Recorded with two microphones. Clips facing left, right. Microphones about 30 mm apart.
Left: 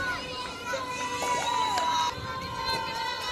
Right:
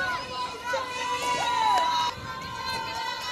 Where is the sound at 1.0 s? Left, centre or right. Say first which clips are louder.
Right 1 dB; right.